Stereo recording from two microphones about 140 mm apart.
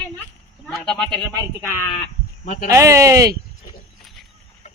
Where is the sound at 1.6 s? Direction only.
15° left (ahead or behind).